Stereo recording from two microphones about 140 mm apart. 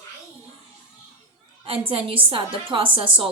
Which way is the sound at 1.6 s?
40° right (ahead or behind).